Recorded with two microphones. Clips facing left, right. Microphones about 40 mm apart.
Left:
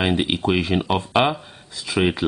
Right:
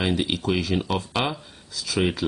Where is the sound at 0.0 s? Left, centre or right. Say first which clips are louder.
Left 4 dB; left.